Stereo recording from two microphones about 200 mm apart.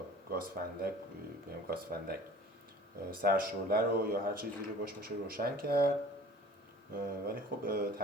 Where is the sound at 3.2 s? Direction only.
45° right (ahead or behind).